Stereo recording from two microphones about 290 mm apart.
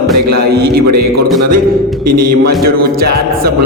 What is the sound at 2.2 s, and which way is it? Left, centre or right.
Speech, right.